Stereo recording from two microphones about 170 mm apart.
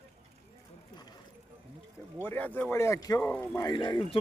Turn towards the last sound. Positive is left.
turn(degrees=25)  # may be behind; listen again after turning